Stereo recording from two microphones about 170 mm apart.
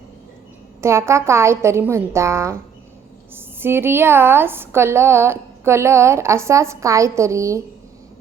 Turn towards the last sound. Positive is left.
turn(degrees=-15)  # may be behind; listen again after turning